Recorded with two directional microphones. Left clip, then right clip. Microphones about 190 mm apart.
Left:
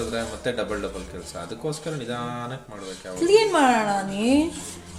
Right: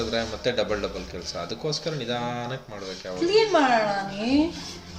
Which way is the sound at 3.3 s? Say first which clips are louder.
Left 2 dB; 55° left (ahead or behind).